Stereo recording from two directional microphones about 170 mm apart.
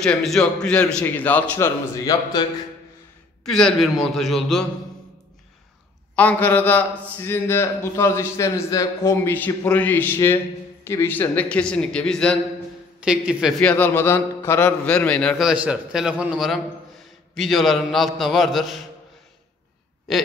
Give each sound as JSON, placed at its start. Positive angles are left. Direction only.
{"t": 0.0, "sound": "a man's voice", "side_deg": 5}
{"t": 2.0, "sound": "speech", "side_deg": 20}
{"t": 3.4, "sound": "a man's voice", "side_deg": 0}
{"t": 6.1, "sound": "a man's voice", "side_deg": 10}
{"t": 13.0, "sound": "a man's voice", "side_deg": -5}